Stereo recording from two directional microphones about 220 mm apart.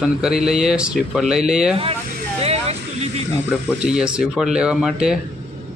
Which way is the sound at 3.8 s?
5° right (ahead or behind).